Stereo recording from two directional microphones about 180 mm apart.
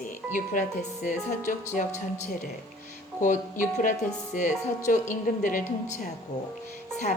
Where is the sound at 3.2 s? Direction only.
45° left (ahead or behind).